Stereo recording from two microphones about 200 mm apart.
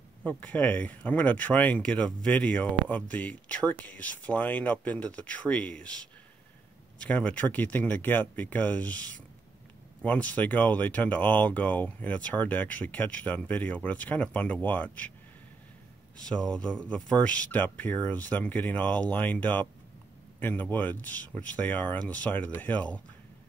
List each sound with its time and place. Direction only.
0.2 s speech: 5° left (ahead or behind)
7.0 s speech: 5° left (ahead or behind)
16.5 s speech: 5° left (ahead or behind)